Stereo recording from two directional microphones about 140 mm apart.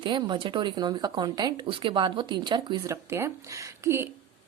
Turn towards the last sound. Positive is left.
turn(degrees=-20)  # may be behind; listen again after turning